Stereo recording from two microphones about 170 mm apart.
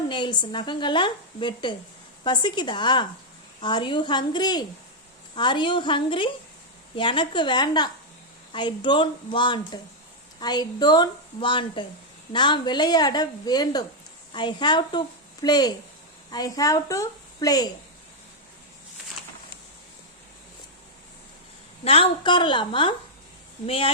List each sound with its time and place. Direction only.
0.1 s a woman's voice: 25° left (ahead or behind)
21.8 s a woman's voice: 35° left (ahead or behind)